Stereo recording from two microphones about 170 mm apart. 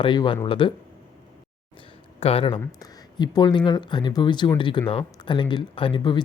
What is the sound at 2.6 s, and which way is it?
Speech, 20° left (ahead or behind).